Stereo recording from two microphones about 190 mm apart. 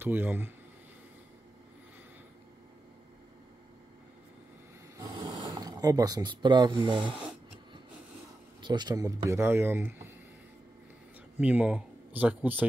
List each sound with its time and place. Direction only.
0.0 s speech: 10° right (ahead or behind)
4.9 s a sound: 20° right (ahead or behind)
8.6 s speech: 20° right (ahead or behind)
11.3 s speech: 10° right (ahead or behind)